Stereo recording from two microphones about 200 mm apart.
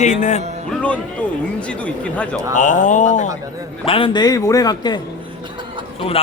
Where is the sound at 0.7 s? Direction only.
5° left (ahead or behind).